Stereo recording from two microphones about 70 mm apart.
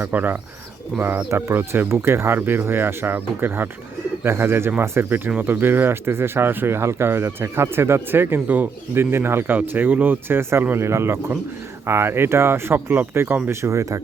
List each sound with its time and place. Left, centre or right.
0.0 s speech: right
9.6 s speech: right